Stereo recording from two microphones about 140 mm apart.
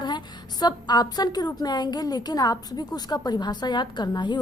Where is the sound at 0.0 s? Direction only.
35° left (ahead or behind).